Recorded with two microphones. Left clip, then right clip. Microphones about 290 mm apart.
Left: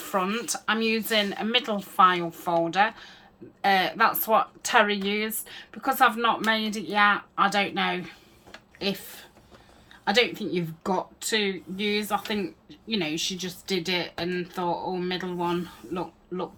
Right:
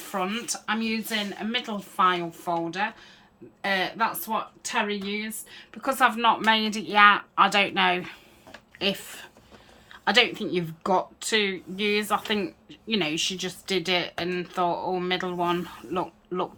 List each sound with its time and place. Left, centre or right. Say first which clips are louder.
0.1 s a woman's voice: left 2 dB; centre